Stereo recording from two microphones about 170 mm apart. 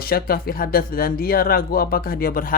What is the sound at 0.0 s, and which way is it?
Speech, 60° left (ahead or behind).